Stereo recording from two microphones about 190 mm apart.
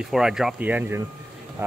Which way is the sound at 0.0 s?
5° right (ahead or behind).